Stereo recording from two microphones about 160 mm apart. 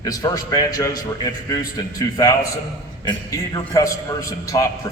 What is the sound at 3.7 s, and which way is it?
A man's voice, 20° left (ahead or behind).